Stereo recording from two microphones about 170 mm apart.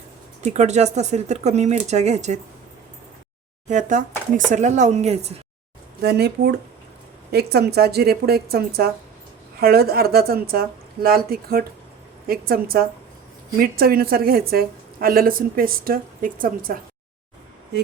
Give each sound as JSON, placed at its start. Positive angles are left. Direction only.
{"t": 0.4, "sound": "speech", "side_deg": -40}
{"t": 3.7, "sound": "speech", "side_deg": -45}
{"t": 6.0, "sound": "a woman's voice", "side_deg": -75}